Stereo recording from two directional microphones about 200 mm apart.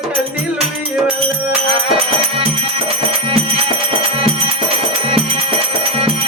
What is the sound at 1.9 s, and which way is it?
Music, 30° right (ahead or behind).